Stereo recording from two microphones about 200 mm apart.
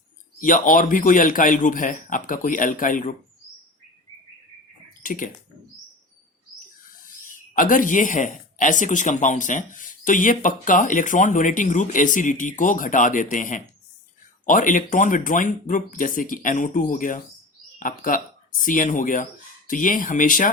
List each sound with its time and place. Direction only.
0.3 s a man's voice: 40° left (ahead or behind)
5.0 s speech: 45° left (ahead or behind)
7.3 s speech: 45° left (ahead or behind)